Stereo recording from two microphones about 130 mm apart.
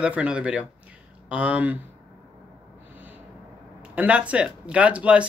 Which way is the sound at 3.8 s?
10° right (ahead or behind).